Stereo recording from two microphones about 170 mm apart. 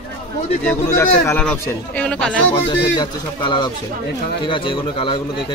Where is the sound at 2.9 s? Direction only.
25° left (ahead or behind).